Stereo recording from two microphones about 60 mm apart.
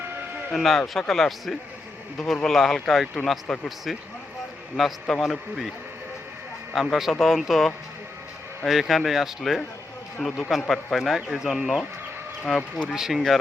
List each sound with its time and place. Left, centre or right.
0.0 s a sound: right
0.5 s a man's voice: centre
4.8 s speech: centre
6.7 s speech: centre